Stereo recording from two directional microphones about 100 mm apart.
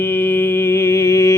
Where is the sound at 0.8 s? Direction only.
25° left (ahead or behind).